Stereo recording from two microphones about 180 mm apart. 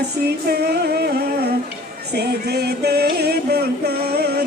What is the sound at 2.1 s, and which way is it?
Music, 65° right (ahead or behind).